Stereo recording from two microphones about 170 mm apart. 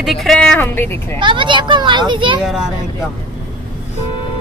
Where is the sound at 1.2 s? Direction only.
30° right (ahead or behind).